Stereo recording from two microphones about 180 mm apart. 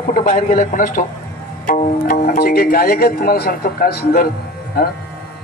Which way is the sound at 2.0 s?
55° left (ahead or behind).